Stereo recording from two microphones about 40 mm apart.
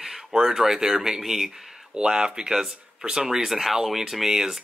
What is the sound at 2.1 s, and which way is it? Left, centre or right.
Speech, right.